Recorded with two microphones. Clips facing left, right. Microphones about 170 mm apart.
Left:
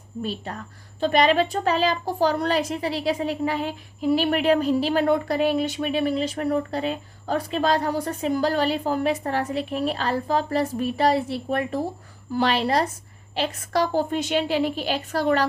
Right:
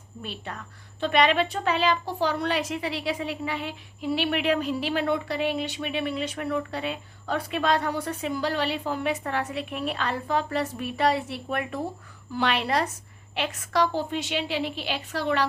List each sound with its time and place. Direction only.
0.2 s a woman's voice: 35° left (ahead or behind)